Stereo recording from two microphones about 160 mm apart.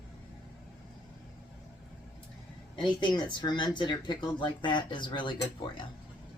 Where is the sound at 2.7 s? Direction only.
30° left (ahead or behind).